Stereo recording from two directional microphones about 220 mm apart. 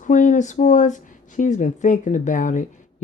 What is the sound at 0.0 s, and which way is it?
Speech, 35° left (ahead or behind).